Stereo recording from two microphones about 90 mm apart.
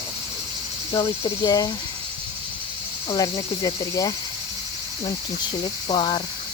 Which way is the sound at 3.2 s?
40° left (ahead or behind).